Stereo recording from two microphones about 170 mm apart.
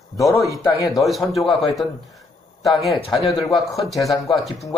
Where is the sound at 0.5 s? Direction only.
20° left (ahead or behind).